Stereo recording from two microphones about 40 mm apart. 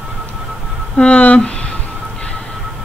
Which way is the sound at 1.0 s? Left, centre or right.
Left.